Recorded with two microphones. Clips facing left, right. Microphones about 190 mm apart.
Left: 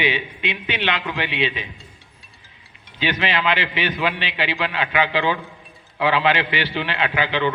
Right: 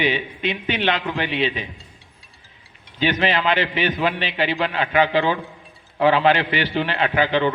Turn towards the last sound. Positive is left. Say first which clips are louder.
# right 3 dB
turn(degrees=-45)  # may be behind; listen again after turning